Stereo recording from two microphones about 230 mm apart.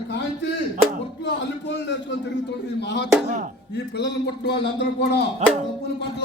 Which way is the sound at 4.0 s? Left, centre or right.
Left.